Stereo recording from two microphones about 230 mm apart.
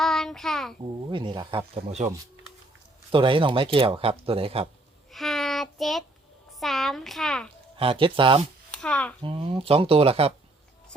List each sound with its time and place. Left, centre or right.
0.0 s child singing: centre
1.1 s speech: right
3.1 s speech: right
5.1 s child singing: centre
6.6 s a child's voice: centre
7.8 s speech: right
8.7 s a child's voice: centre
9.2 s speech: right